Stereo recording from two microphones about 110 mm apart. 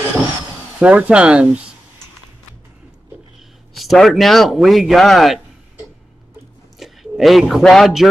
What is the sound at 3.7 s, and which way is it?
Speech, centre (ahead or behind).